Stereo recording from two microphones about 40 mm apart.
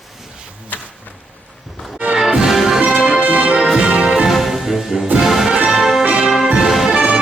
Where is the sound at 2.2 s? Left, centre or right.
Centre.